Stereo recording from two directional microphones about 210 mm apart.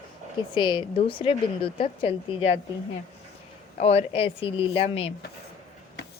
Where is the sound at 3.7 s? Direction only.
30° left (ahead or behind).